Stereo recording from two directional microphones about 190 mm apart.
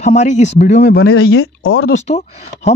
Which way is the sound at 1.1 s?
90° left.